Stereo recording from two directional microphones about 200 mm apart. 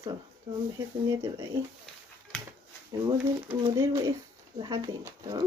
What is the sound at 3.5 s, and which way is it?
Speech, 15° right (ahead or behind).